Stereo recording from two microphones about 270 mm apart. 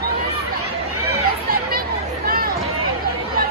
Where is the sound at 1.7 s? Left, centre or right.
Right.